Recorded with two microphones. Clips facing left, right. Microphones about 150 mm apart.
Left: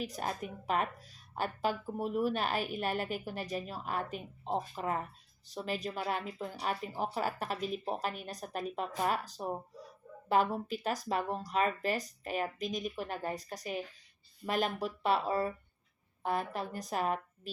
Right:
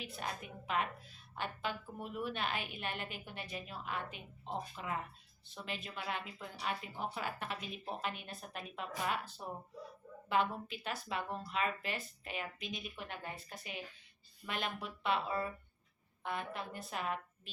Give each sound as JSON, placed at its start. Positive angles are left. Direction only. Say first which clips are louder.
{"t": 0.0, "sound": "a woman's voice", "louder": "left 6 dB", "side_deg": 40}